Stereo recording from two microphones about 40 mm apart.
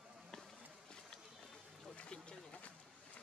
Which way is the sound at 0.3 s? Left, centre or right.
Centre.